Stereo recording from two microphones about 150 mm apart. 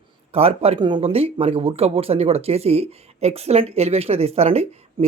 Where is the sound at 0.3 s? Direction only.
40° right (ahead or behind).